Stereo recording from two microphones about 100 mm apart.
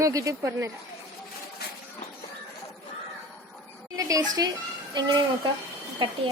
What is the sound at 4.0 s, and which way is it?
A woman's voice, 35° right (ahead or behind).